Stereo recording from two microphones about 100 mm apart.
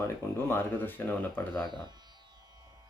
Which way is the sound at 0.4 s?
20° left (ahead or behind).